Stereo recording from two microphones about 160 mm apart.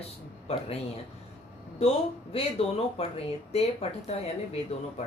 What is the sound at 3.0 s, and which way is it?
Speech, 40° left (ahead or behind).